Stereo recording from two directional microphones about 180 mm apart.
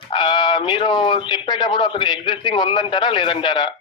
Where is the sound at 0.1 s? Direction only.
25° left (ahead or behind).